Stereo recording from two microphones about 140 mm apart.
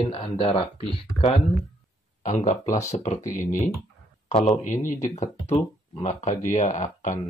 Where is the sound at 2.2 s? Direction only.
60° left (ahead or behind).